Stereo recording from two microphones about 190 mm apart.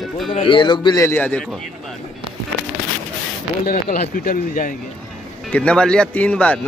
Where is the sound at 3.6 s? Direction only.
45° left (ahead or behind).